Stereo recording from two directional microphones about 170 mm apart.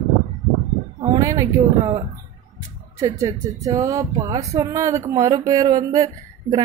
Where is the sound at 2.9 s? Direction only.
20° right (ahead or behind).